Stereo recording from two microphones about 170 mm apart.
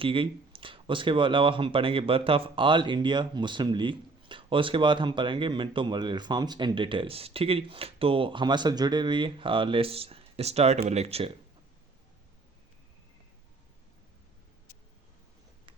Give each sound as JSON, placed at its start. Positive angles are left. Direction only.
{"t": 0.0, "sound": "speech", "side_deg": -30}